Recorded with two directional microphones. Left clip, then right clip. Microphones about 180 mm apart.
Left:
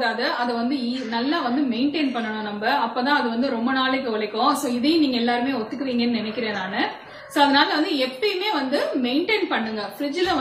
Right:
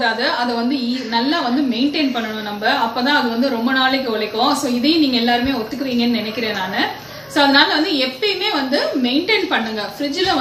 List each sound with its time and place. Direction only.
1.1 s a woman's voice: centre (ahead or behind)
7.3 s a woman's voice: centre (ahead or behind)